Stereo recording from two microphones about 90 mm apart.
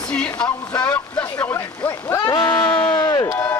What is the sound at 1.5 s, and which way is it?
Speech, 35° left (ahead or behind).